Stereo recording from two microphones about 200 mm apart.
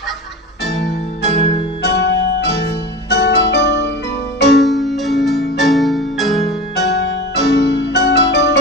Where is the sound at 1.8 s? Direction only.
60° left (ahead or behind).